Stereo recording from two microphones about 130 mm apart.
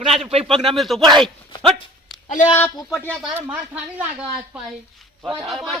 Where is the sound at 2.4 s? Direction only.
80° left.